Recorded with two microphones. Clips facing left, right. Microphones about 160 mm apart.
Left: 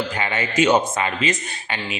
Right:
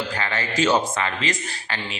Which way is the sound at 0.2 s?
20° left (ahead or behind).